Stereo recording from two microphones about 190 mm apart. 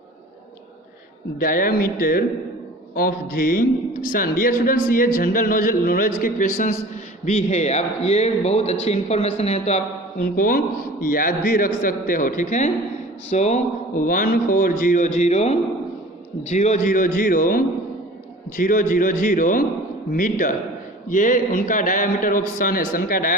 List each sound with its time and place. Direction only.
1.4 s a man's voice: 50° left (ahead or behind)